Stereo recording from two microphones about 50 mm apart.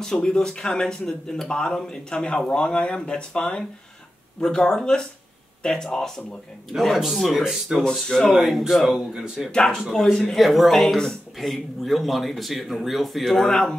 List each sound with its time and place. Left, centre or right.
0.0 s speech: centre
8.1 s speech: centre
9.1 s speech: centre
9.5 s speech: centre
10.1 s speech: centre